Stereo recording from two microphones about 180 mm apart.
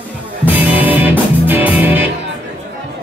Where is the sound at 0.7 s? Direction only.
10° right (ahead or behind).